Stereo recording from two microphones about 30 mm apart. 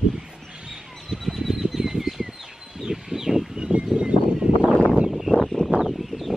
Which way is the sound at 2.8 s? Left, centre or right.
Centre.